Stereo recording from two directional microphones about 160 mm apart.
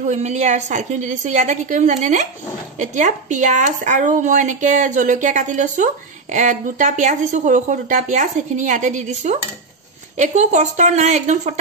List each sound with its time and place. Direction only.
0.1 s a woman's voice: 45° right (ahead or behind)